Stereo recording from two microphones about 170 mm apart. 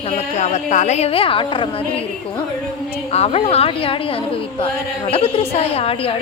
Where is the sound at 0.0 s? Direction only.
40° left (ahead or behind).